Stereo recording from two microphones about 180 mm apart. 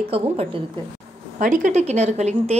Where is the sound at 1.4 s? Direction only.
45° right (ahead or behind).